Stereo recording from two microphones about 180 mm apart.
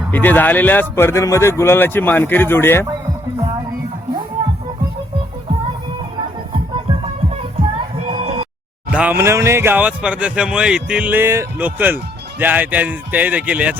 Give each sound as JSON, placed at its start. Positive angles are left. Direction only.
{"t": 0.1, "sound": "speech", "side_deg": 10}
{"t": 6.5, "sound": "music", "side_deg": -30}
{"t": 8.1, "sound": "music", "side_deg": -35}
{"t": 8.9, "sound": "speech", "side_deg": -10}